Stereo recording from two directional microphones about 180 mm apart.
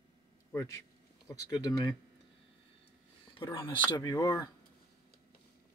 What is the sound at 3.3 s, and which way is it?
Speech, 30° left (ahead or behind).